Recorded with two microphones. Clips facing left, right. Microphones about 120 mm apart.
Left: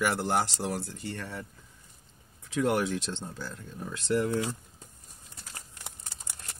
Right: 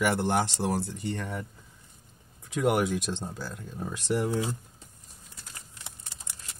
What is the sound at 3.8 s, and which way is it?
Speech, 25° right (ahead or behind).